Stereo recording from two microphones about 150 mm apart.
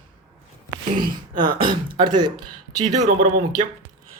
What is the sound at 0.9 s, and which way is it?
Speech, 30° right (ahead or behind).